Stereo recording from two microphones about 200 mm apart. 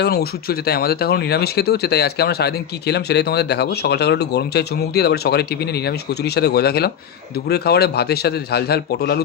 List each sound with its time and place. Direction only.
0.0 s speech: 50° left (ahead or behind)